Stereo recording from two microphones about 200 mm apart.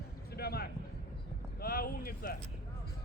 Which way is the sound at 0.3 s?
50° left (ahead or behind).